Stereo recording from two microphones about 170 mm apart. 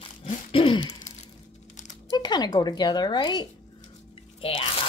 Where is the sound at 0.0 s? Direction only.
30° left (ahead or behind).